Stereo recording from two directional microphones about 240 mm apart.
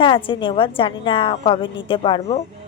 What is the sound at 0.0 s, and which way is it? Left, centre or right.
Speech, left.